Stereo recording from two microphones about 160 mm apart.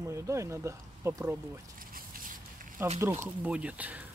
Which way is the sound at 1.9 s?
60° right (ahead or behind).